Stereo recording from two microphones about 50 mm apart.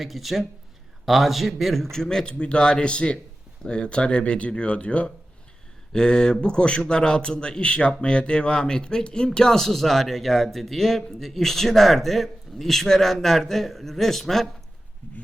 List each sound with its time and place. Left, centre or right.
0.0 s a man's voice: centre